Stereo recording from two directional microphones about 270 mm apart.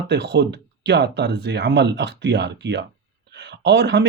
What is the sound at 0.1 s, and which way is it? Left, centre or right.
Speech, right.